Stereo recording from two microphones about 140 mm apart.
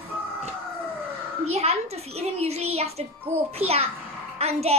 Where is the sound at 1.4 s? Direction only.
50° right (ahead or behind).